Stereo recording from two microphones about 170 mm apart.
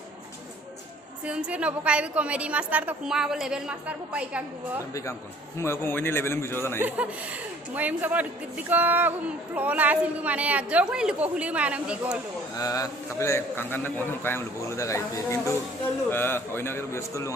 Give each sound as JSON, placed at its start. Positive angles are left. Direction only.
{"t": 1.2, "sound": "a woman's voice", "side_deg": -5}
{"t": 5.5, "sound": "a man's voice", "side_deg": 15}
{"t": 6.7, "sound": "a woman's voice", "side_deg": -10}
{"t": 12.5, "sound": "a man's voice", "side_deg": 20}